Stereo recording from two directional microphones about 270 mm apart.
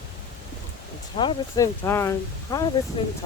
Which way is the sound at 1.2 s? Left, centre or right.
Centre.